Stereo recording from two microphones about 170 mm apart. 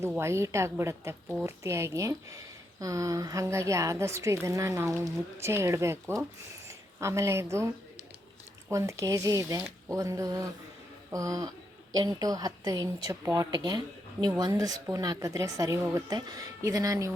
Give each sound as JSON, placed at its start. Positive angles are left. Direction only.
{"t": 0.2, "sound": "a woman's voice", "side_deg": -15}
{"t": 8.7, "sound": "a woman's voice", "side_deg": -15}